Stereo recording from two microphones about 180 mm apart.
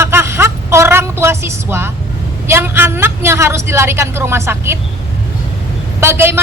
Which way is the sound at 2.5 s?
10° right (ahead or behind).